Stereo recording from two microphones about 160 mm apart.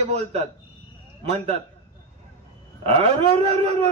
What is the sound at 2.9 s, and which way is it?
Speech, 40° right (ahead or behind).